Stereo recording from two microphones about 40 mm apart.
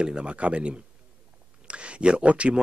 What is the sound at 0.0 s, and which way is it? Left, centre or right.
Speech, right.